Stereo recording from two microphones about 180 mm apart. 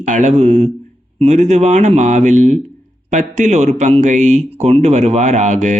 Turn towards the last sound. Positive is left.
turn(degrees=-40)  # may be behind; listen again after turning